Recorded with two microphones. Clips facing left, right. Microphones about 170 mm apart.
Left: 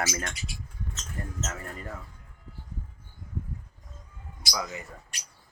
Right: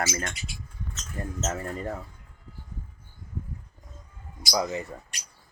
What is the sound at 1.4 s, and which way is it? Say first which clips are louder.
Speech: right 7 dB; 35° right (ahead or behind).